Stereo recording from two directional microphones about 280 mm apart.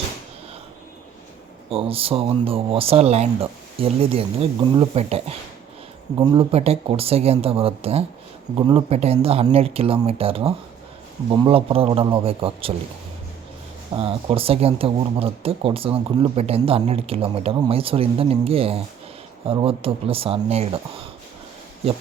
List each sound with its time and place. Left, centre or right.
1.7 s speech: centre
13.9 s speech: centre